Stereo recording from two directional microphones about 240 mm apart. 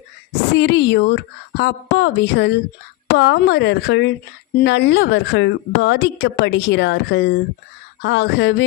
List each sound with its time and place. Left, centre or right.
0.5 s a woman's voice: left